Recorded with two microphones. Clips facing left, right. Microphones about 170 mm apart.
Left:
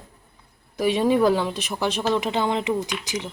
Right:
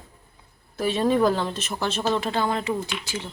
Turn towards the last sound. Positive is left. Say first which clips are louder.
# left 3 dB
turn(degrees=15)  # may be behind; listen again after turning